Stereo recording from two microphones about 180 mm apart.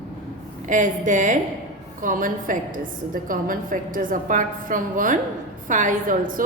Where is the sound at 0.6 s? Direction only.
45° right (ahead or behind).